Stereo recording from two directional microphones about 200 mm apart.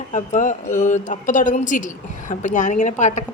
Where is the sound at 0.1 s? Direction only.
40° left (ahead or behind).